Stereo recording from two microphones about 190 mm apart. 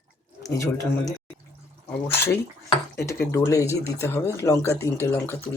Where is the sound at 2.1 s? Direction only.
15° left (ahead or behind).